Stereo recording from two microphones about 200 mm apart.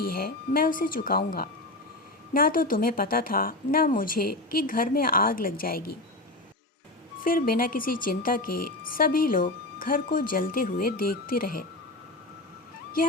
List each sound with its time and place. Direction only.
0.2 s speech: 45° left (ahead or behind)
7.3 s speech: 45° left (ahead or behind)
13.0 s speech: 45° left (ahead or behind)